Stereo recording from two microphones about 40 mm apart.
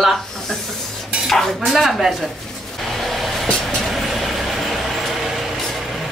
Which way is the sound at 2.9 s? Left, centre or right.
Centre.